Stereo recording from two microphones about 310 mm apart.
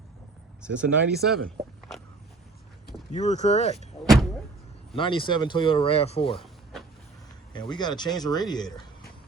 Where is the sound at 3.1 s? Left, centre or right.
Left.